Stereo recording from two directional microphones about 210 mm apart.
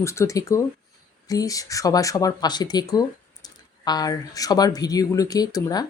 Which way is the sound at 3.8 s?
20° left (ahead or behind).